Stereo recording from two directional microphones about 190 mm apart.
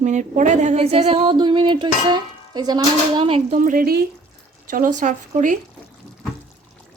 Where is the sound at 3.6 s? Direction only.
45° right (ahead or behind).